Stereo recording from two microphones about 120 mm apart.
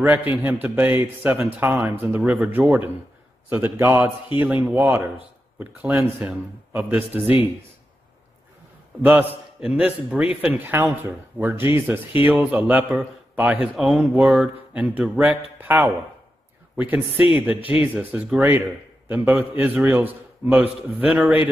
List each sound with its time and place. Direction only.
0.0 s a man's voice: 15° right (ahead or behind)
9.0 s a man's voice: 15° right (ahead or behind)